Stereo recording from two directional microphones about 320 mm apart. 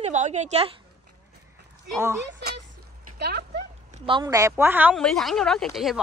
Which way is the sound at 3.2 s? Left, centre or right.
Right.